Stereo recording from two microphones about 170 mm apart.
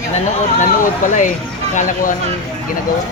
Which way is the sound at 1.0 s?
50° left (ahead or behind).